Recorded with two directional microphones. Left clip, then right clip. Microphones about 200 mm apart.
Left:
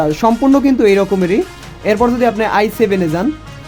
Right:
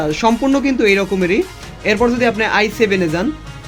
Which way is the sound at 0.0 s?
55° left (ahead or behind).